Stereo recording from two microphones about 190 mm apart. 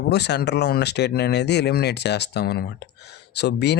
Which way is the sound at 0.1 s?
60° left (ahead or behind).